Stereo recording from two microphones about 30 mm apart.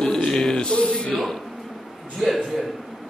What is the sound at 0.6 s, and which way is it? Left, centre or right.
Speech, left.